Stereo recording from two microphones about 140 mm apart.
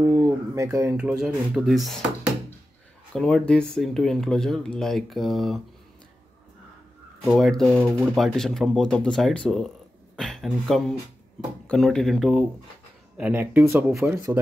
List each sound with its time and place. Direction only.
0.0 s a sound: 20° right (ahead or behind)
0.9 s speech: 5° right (ahead or behind)
3.1 s speech: 5° left (ahead or behind)
7.2 s speech: centre (ahead or behind)
13.2 s speech: 15° right (ahead or behind)